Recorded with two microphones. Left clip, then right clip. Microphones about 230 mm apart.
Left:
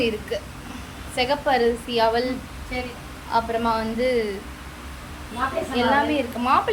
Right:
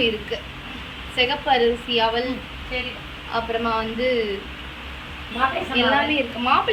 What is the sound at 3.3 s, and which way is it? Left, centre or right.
Speech, centre.